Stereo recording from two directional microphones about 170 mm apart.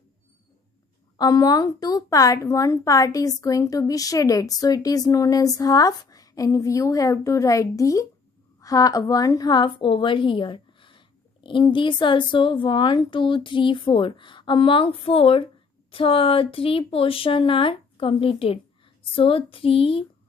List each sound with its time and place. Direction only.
1.1 s a woman's voice: 25° left (ahead or behind)